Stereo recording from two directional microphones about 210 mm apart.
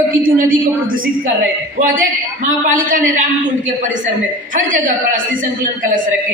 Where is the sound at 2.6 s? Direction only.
40° right (ahead or behind).